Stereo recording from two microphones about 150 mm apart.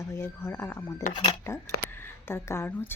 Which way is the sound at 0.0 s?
15° left (ahead or behind).